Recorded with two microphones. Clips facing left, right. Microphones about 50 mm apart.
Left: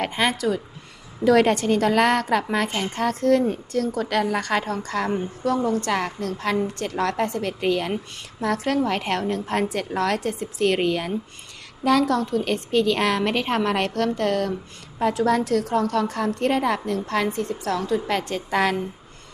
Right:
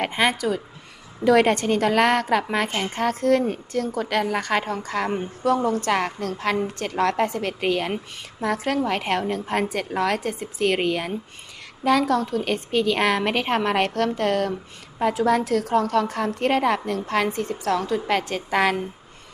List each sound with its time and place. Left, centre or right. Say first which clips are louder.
0.2 s a woman's voice: right 1 dB; centre